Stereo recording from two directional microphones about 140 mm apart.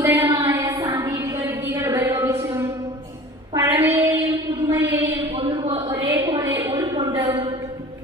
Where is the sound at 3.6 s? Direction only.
20° right (ahead or behind).